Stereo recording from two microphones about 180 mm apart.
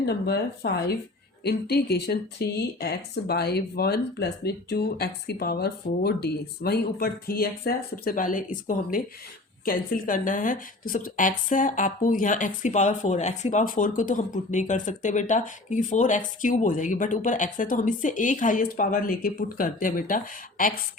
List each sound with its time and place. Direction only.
0.0 s speech: 65° left (ahead or behind)